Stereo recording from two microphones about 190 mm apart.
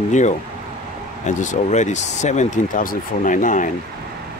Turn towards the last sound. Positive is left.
turn(degrees=45)  # may be behind; listen again after turning